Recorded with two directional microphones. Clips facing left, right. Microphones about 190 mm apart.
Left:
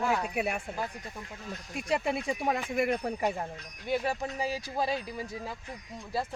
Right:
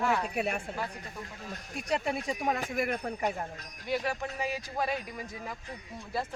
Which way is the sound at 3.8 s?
35° left (ahead or behind).